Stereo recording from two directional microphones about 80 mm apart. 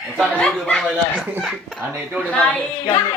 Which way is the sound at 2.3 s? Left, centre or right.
Centre.